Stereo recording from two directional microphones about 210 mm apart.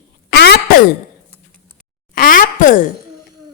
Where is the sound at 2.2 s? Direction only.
40° left (ahead or behind).